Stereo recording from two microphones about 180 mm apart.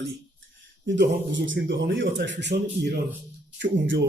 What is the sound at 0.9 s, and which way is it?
A man's voice, 85° right.